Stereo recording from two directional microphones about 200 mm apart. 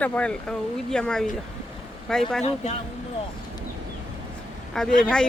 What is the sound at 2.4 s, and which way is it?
Speech, 35° left (ahead or behind).